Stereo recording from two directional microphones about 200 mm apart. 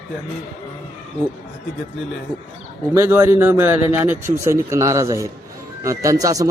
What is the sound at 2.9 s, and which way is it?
Speech, 15° right (ahead or behind).